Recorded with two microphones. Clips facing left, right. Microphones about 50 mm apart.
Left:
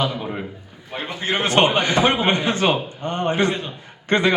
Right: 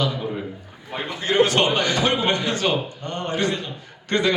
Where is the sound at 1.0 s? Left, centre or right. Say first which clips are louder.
Right 4 dB; left.